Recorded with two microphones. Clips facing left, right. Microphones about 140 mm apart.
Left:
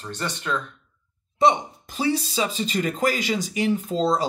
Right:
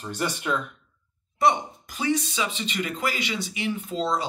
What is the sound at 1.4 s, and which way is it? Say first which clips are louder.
Speech: left 3 dB; 25° left (ahead or behind).